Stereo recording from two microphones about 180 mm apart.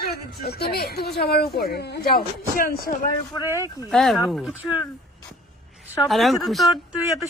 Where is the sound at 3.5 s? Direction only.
15° right (ahead or behind).